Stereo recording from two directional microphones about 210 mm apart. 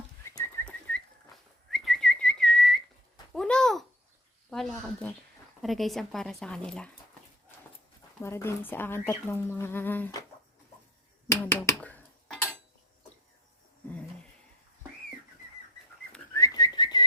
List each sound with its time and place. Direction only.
0.3 s bird: 15° left (ahead or behind)
1.7 s whistling: centre (ahead or behind)
3.3 s a sound: 5° left (ahead or behind)
4.5 s speech: centre (ahead or behind)
8.2 s speech: 10° left (ahead or behind)
11.3 s a sound: 10° left (ahead or behind)
16.3 s whistling: 15° left (ahead or behind)